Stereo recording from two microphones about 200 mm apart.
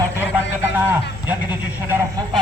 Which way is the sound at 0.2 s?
10° right (ahead or behind).